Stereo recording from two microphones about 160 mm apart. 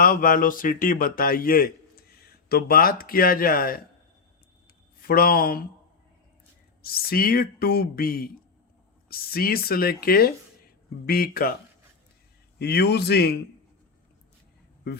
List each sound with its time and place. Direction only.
0.0 s speech: 60° left (ahead or behind)
5.0 s speech: 65° left (ahead or behind)
6.8 s speech: 70° left (ahead or behind)
12.5 s speech: 90° left